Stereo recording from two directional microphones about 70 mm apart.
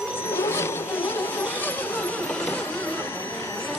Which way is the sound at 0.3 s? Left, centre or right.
Left.